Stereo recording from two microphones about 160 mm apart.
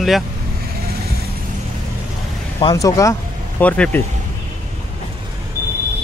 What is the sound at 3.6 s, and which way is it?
Speech, 10° left (ahead or behind).